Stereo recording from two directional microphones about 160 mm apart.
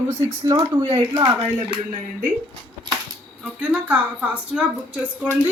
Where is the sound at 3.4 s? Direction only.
5° right (ahead or behind).